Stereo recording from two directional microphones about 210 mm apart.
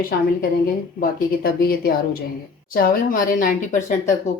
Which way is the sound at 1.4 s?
45° left (ahead or behind).